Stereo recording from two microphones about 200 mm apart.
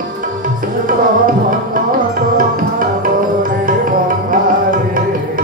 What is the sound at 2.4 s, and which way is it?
Music, 45° right (ahead or behind).